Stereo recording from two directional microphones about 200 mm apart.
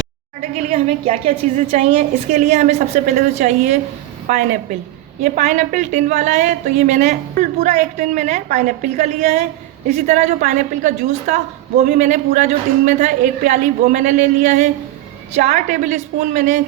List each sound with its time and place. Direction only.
0.7 s a woman's voice: 35° right (ahead or behind)